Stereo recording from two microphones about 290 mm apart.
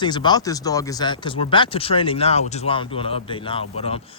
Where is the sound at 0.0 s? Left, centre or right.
Centre.